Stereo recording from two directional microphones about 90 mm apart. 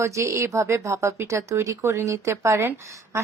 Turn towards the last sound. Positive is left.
turn(degrees=-30)  # may be behind; listen again after turning